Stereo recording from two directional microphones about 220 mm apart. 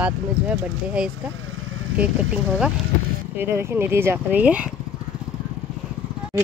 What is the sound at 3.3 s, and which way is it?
Speech, 10° right (ahead or behind).